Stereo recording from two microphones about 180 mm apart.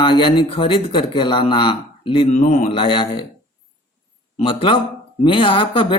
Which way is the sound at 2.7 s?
30° left (ahead or behind).